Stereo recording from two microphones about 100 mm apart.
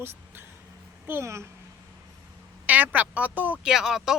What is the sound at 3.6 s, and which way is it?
Speech, 5° right (ahead or behind).